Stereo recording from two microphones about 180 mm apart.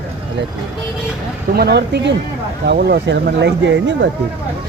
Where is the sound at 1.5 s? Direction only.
65° right (ahead or behind); by 4.1 s 80° right.